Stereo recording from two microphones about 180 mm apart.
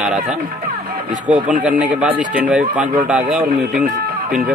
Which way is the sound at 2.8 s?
40° right (ahead or behind).